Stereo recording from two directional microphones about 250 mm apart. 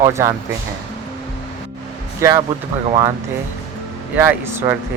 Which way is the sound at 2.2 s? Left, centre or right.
Centre.